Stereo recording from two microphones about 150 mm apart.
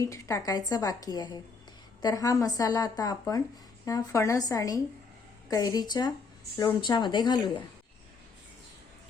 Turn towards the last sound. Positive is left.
turn(degrees=30)  # may be behind; listen again after turning